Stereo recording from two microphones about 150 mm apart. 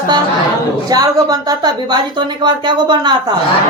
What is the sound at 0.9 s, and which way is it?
A woman's voice, 25° right (ahead or behind).